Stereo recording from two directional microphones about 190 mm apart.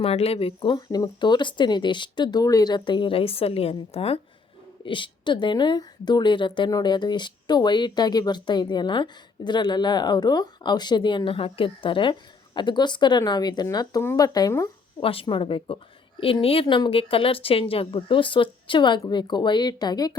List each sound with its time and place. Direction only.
0.0 s a woman's voice: 30° left (ahead or behind)